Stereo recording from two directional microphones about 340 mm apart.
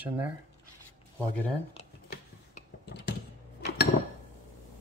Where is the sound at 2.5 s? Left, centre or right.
Left.